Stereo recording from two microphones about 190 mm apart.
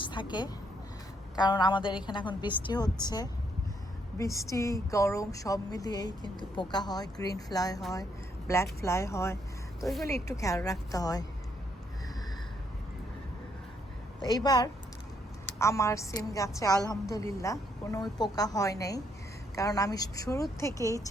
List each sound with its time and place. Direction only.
0.0 s a woman's voice: 25° left (ahead or behind)
4.4 s a woman's voice: 15° left (ahead or behind)
9.8 s speech: centre (ahead or behind)
10.2 s a woman's voice: 15° left (ahead or behind)
14.3 s a woman's voice: 20° left (ahead or behind)